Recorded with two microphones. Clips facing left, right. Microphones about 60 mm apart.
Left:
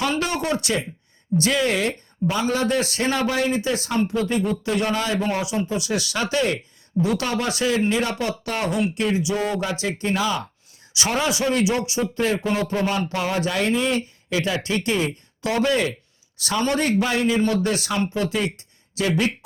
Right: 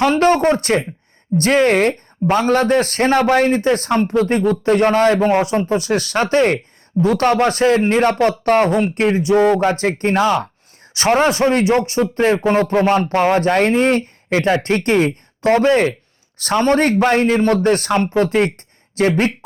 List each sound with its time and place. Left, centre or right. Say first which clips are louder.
0.0 s speech: right 10 dB; right